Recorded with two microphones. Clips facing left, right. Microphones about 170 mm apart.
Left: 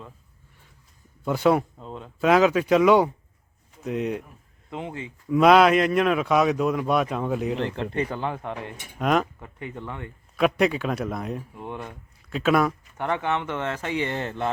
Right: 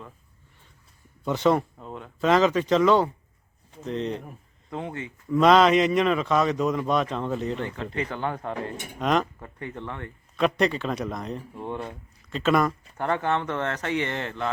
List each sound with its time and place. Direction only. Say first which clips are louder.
1.2 s speech: left 1 dB; 5° left (ahead or behind); by 5.1 s 25° left (ahead or behind)
5.3 s a man's voice: left 1 dB; 5° left (ahead or behind)